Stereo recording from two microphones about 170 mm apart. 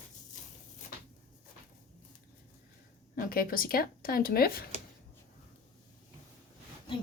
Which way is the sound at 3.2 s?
60° left (ahead or behind).